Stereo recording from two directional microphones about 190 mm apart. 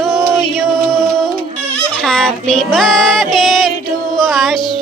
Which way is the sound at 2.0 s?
5° left (ahead or behind).